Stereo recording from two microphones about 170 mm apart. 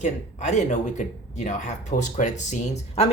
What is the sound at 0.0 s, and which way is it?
Speech, 45° left (ahead or behind).